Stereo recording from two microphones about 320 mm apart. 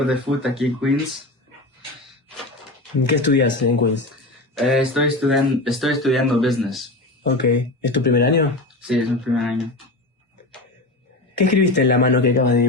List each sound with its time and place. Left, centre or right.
0.0 s speech: centre
3.0 s speech: left
4.5 s speech: centre
7.3 s speech: left
9.3 s speech: centre
11.4 s speech: left